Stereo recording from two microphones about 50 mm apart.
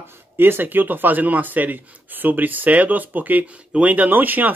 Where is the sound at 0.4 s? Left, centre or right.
Right.